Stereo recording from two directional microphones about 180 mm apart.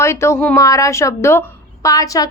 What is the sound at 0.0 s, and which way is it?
A woman's voice, 15° left (ahead or behind).